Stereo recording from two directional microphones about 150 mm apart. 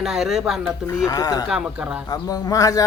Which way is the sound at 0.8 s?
20° left (ahead or behind).